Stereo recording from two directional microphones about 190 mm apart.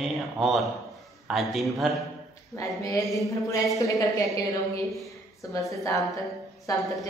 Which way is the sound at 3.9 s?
15° left (ahead or behind).